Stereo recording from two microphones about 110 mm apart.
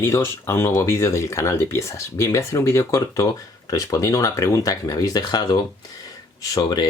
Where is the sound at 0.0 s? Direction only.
25° left (ahead or behind).